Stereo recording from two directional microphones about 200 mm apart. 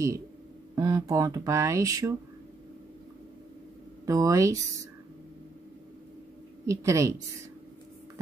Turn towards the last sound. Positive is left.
turn(degrees=-15)  # may be behind; listen again after turning